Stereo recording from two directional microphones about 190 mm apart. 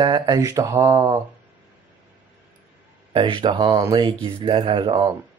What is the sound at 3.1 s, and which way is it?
Speech, 25° right (ahead or behind).